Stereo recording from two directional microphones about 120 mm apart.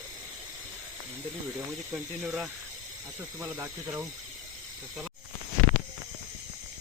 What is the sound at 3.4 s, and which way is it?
Speech, 20° right (ahead or behind).